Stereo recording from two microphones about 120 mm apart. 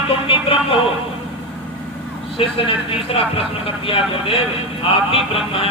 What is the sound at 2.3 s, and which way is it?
Speech, 50° left (ahead or behind).